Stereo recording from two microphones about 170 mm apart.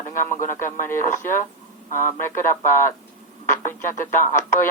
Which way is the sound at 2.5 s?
15° left (ahead or behind).